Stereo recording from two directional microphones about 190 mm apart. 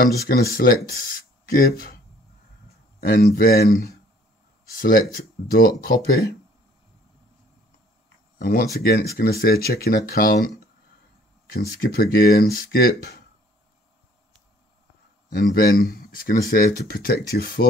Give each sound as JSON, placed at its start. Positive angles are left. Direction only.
{"t": 0.2, "sound": "speech", "side_deg": 50}
{"t": 3.0, "sound": "speech", "side_deg": 50}
{"t": 4.7, "sound": "speech", "side_deg": 50}
{"t": 8.4, "sound": "speech", "side_deg": 50}
{"t": 11.5, "sound": "speech", "side_deg": 50}
{"t": 15.2, "sound": "speech", "side_deg": 50}